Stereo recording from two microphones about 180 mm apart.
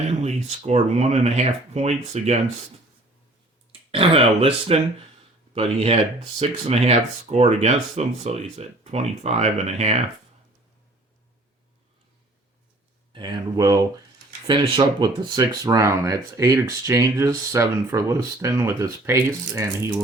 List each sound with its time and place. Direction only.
0.2 s speech: 40° right (ahead or behind)
3.7 s speech: 30° right (ahead or behind)
13.1 s speech: 20° right (ahead or behind)